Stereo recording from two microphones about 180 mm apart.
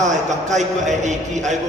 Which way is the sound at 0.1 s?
40° right (ahead or behind).